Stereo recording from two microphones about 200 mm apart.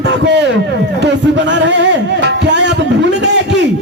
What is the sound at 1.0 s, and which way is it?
Music, 60° right (ahead or behind).